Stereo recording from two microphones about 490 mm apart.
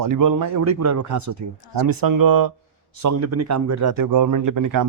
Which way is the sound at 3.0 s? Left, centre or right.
Right.